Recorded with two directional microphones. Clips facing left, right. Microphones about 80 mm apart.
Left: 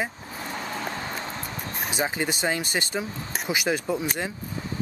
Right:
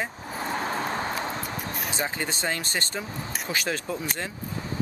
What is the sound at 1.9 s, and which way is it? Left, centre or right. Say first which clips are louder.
Speech: left 5 dB; centre.